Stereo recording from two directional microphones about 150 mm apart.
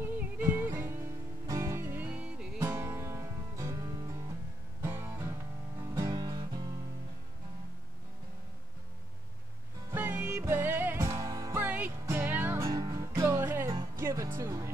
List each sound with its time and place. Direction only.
0.0 s music: 15° right (ahead or behind)
2.6 s music: 15° right (ahead or behind)
9.8 s music: 10° right (ahead or behind)